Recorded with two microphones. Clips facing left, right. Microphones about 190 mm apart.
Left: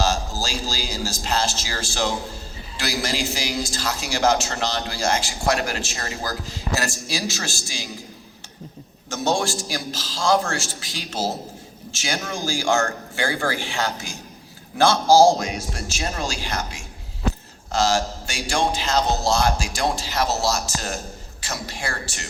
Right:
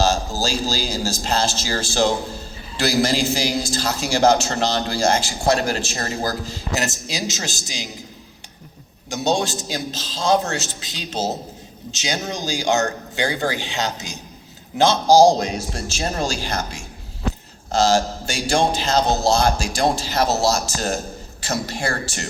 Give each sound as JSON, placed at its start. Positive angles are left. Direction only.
{"t": 0.0, "sound": "a man's voice", "side_deg": -25}
{"t": 9.0, "sound": "a man's voice", "side_deg": -15}
{"t": 15.4, "sound": "speech", "side_deg": -30}
{"t": 17.7, "sound": "a man's voice", "side_deg": -25}
{"t": 18.5, "sound": "speech", "side_deg": -40}
{"t": 20.1, "sound": "a man's voice", "side_deg": -25}
{"t": 20.5, "sound": "speech", "side_deg": -40}